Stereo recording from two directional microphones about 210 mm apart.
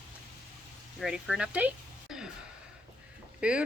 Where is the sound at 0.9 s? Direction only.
Centre (ahead or behind).